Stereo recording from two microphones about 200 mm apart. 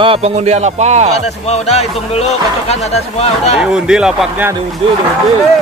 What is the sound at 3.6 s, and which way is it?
Speech, 5° right (ahead or behind).